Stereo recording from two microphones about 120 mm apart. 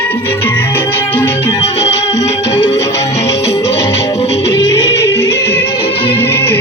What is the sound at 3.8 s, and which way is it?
Music, 50° left (ahead or behind).